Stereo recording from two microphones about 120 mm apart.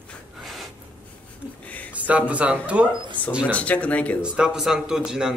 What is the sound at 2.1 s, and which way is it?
Speech, 10° right (ahead or behind).